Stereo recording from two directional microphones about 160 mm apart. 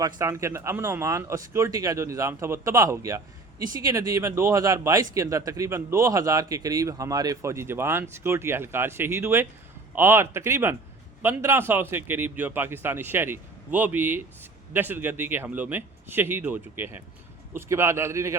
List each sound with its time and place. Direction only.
0.0 s a man's voice: 20° right (ahead or behind)